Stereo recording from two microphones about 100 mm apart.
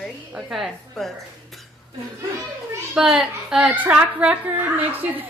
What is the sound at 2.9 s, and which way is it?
A woman's voice, 5° right (ahead or behind).